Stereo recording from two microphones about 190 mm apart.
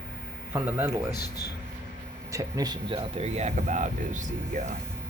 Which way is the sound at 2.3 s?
15° right (ahead or behind).